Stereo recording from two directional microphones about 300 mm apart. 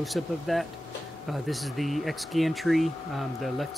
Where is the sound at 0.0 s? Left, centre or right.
Centre.